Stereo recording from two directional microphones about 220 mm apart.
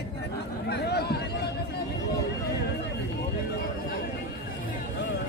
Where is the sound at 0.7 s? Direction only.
45° left (ahead or behind).